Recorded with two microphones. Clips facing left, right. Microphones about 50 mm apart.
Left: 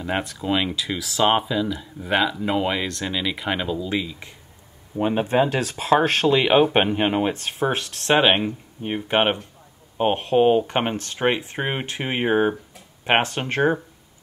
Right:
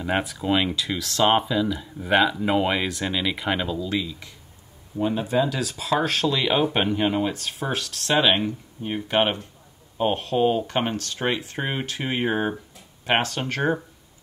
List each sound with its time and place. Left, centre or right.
0.0 s speech: centre; by 4.4 s left
4.9 s speech: left